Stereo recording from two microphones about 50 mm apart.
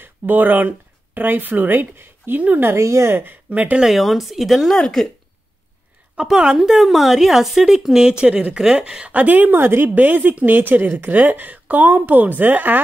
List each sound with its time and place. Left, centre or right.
0.0 s speech: right
2.8 s a woman's voice: right
3.4 s speech: right
3.8 s speech: centre
4.8 s speech: centre
6.2 s speech: centre
9.1 s a woman's voice: right
9.8 s a woman's voice: right